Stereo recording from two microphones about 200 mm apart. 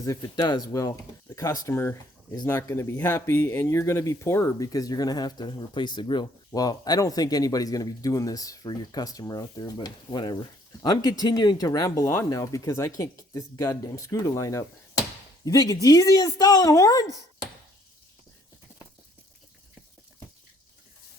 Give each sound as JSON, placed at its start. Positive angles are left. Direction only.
{"t": 0.0, "sound": "speech", "side_deg": 20}